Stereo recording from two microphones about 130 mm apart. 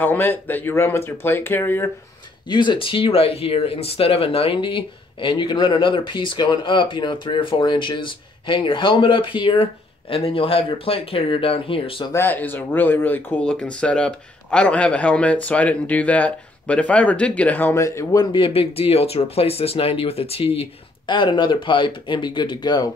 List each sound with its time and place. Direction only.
0.0 s speech: 15° left (ahead or behind)
2.4 s speech: 35° left (ahead or behind)
12.0 s speech: 20° left (ahead or behind); by 20.6 s 50° left (ahead or behind)
21.1 s speech: 35° left (ahead or behind)